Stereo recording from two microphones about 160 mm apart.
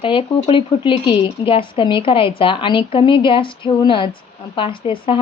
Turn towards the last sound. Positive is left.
turn(degrees=35)  # may be behind; listen again after turning